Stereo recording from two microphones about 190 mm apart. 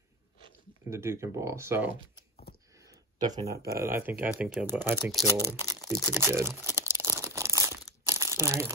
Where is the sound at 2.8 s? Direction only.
20° right (ahead or behind).